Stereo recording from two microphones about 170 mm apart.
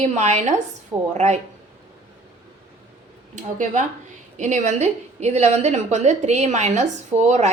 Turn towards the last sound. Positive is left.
turn(degrees=-40)  # may be behind; listen again after turning